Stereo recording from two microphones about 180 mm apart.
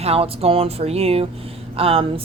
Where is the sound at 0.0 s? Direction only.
35° right (ahead or behind).